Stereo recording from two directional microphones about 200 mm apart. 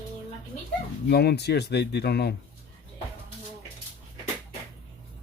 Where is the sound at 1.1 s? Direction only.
55° left (ahead or behind).